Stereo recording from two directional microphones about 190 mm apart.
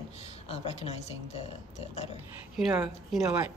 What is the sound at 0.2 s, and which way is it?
Speech, 35° left (ahead or behind).